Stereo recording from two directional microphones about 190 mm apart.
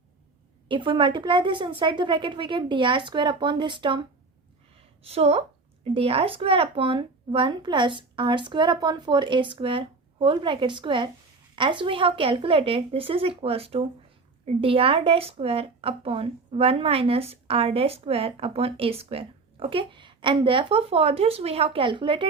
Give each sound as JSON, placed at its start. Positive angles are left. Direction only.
{"t": 0.7, "sound": "speech", "side_deg": -25}
{"t": 5.0, "sound": "speech", "side_deg": -30}